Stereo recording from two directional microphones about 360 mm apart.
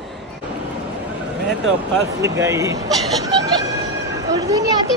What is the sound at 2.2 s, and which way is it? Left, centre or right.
Speech, centre.